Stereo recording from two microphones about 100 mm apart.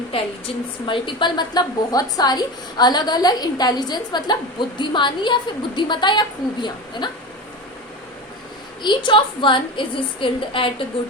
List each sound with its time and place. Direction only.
0.1 s a woman's voice: 60° left (ahead or behind)
8.8 s a woman's voice: 50° left (ahead or behind)